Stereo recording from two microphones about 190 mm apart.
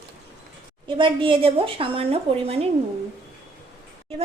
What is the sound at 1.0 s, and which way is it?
A woman's voice, 25° right (ahead or behind).